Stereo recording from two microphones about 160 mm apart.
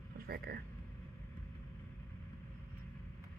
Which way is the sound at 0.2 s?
70° right (ahead or behind).